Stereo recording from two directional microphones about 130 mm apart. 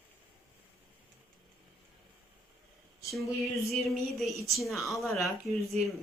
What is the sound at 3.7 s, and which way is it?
Speech, centre (ahead or behind).